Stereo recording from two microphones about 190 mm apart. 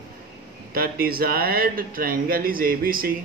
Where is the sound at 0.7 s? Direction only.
50° right (ahead or behind).